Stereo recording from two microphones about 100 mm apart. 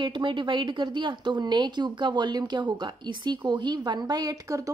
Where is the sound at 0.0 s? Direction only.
55° right (ahead or behind).